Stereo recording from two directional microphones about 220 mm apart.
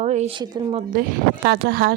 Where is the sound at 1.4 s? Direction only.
50° right (ahead or behind).